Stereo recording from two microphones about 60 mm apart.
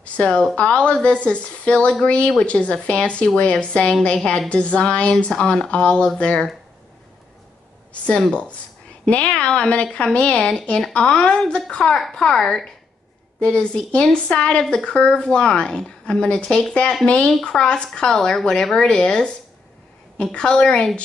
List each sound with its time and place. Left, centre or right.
0.0 s a woman's voice: centre
8.3 s a woman's voice: left